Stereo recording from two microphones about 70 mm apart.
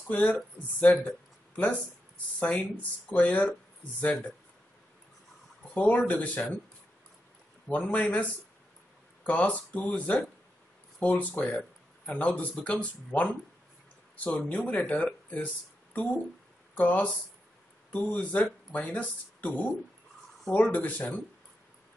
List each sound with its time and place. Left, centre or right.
0.1 s speech: left
5.8 s speech: left
7.7 s speech: centre